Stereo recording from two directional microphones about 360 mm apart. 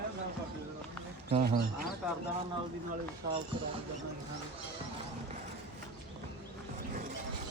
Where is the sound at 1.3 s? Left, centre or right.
Right.